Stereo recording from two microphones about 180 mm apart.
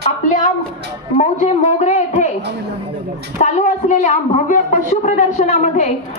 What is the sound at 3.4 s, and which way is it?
A woman's voice, 40° left (ahead or behind).